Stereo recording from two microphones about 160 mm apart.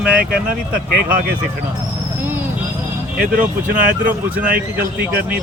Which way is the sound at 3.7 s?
60° right (ahead or behind).